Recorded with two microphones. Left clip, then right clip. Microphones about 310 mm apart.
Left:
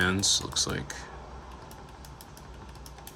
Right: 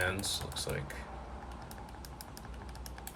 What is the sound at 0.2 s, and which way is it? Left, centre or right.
Speech, left.